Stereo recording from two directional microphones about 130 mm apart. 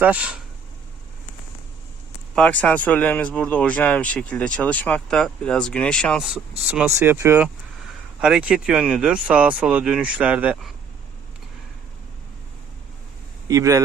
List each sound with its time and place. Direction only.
0.0 s speech: 10° right (ahead or behind)
2.3 s speech: 10° left (ahead or behind); by 7.4 s 20° right (ahead or behind)
8.2 s speech: 10° right (ahead or behind)
13.5 s a man's voice: 25° right (ahead or behind)